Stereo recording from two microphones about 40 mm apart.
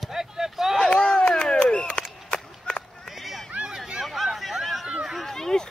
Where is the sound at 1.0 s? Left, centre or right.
Centre.